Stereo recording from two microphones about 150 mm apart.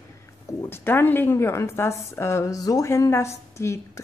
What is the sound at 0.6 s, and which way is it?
A woman's voice, 15° left (ahead or behind).